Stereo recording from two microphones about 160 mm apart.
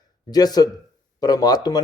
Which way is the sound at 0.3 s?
25° left (ahead or behind).